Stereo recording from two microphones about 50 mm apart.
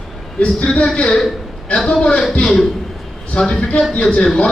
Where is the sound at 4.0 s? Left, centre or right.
Centre.